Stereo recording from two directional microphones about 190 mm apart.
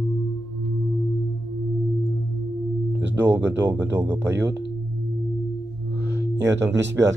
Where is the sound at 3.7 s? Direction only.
10° right (ahead or behind).